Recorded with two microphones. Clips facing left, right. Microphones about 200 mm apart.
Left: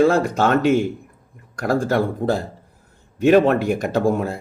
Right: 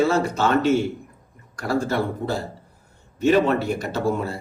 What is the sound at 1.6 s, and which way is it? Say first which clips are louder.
Speech: left 4 dB; 50° left (ahead or behind).